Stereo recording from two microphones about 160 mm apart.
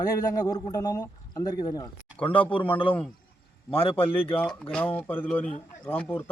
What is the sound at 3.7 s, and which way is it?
Speech, 35° left (ahead or behind).